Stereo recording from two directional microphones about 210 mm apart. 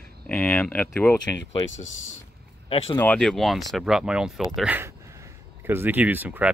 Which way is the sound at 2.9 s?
5° left (ahead or behind).